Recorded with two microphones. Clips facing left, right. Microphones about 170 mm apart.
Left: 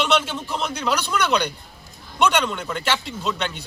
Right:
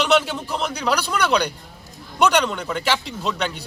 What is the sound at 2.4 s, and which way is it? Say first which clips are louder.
Speech: right 2 dB; centre (ahead or behind).